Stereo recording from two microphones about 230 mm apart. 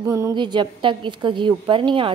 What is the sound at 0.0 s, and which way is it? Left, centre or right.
A woman's voice, centre.